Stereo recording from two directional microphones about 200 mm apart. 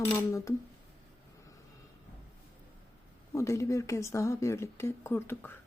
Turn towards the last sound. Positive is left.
turn(degrees=10)  # may be behind; listen again after turning